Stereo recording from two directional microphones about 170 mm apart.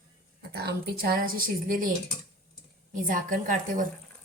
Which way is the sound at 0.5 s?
70° right (ahead or behind).